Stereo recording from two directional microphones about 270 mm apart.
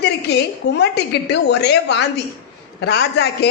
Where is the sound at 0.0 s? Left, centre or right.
Left.